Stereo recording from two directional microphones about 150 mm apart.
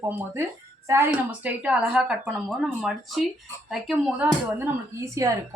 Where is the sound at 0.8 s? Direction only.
15° right (ahead or behind).